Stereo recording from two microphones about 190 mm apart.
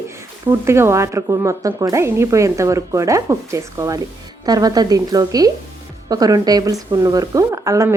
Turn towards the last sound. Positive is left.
turn(degrees=-15)  # may be behind; listen again after turning